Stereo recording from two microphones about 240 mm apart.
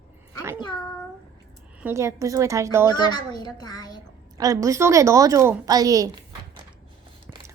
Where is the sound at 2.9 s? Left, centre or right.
Centre.